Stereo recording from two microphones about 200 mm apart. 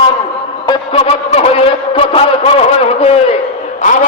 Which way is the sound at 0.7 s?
30° left (ahead or behind).